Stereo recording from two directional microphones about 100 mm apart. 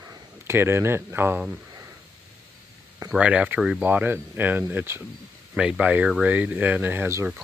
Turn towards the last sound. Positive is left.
turn(degrees=-25)  # may be behind; listen again after turning